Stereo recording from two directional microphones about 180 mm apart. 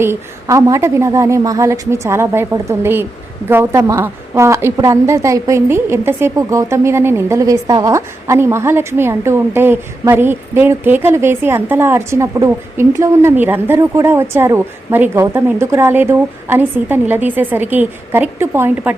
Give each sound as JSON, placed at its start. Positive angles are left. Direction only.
{"t": 0.0, "sound": "a woman's voice", "side_deg": -15}